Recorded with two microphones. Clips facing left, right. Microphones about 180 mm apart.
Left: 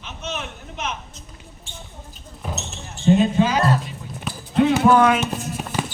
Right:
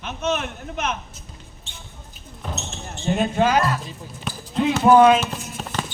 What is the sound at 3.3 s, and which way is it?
Speech, 55° right (ahead or behind).